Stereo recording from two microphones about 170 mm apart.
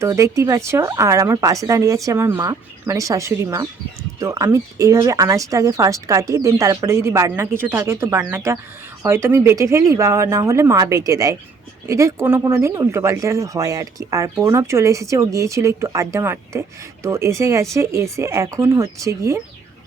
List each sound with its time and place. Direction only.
0.0 s speech: 20° right (ahead or behind)